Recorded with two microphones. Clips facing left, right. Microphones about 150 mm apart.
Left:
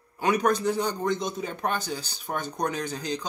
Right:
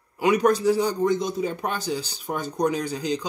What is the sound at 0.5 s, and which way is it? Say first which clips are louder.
Speech: right 5 dB; 5° right (ahead or behind).